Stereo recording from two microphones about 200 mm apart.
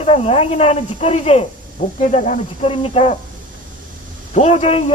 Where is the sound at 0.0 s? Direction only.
30° left (ahead or behind).